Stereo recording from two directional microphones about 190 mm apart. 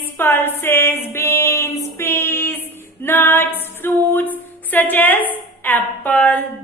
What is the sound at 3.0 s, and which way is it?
Music, 10° left (ahead or behind).